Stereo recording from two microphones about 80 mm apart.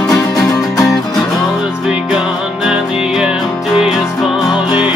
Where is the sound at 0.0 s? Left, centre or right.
Left.